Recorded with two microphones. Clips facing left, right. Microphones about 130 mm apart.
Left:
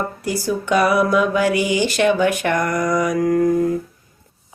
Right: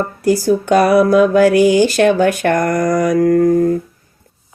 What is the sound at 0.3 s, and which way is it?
Speech, 45° right (ahead or behind).